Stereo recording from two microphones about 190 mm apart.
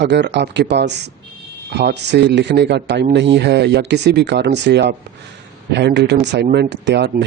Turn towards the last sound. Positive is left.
turn(degrees=-65)  # may be behind; listen again after turning